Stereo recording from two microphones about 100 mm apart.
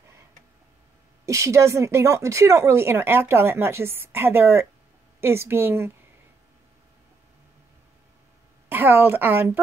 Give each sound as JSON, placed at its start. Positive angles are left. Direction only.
{"t": 1.2, "sound": "speech", "side_deg": -30}
{"t": 8.6, "sound": "a woman's voice", "side_deg": -20}